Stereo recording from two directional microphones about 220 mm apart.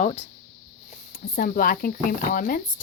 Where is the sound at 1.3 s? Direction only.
40° left (ahead or behind).